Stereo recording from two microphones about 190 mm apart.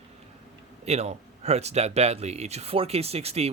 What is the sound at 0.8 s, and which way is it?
Speech, 35° right (ahead or behind).